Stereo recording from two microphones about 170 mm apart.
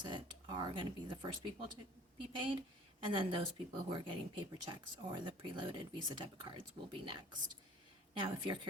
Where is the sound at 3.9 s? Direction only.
30° right (ahead or behind).